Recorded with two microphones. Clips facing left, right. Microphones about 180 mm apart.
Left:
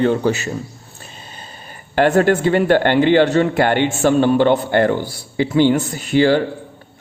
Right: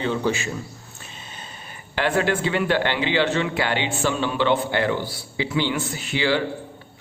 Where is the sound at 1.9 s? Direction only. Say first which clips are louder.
Left 8 dB; 45° left (ahead or behind).